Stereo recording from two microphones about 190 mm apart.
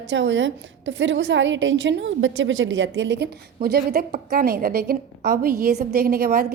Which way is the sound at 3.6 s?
55° right (ahead or behind).